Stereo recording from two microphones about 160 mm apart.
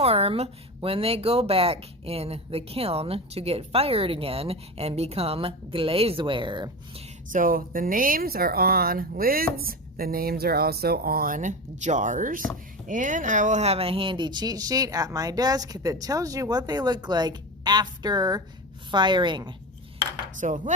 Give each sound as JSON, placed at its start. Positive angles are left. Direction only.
{"t": 0.0, "sound": "a woman's voice", "side_deg": -40}
{"t": 7.3, "sound": "speech", "side_deg": -60}
{"t": 20.4, "sound": "speech", "side_deg": -50}